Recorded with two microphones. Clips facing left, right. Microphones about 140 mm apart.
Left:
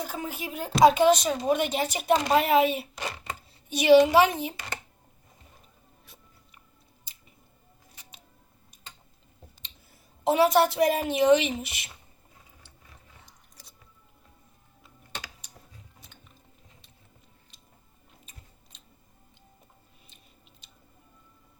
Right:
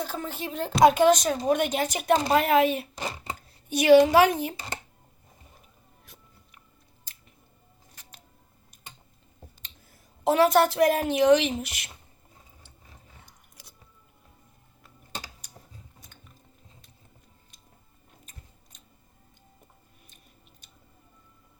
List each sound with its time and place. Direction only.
0.3 s a woman's voice: 10° left (ahead or behind)
2.9 s a sound: 30° right (ahead or behind)
3.7 s a woman's voice: centre (ahead or behind)
9.9 s a woman's voice: 5° left (ahead or behind)
15.1 s typing: 40° right (ahead or behind)